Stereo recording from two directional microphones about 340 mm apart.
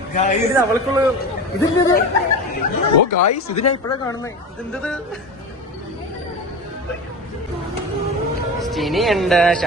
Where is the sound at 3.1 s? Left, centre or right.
Left.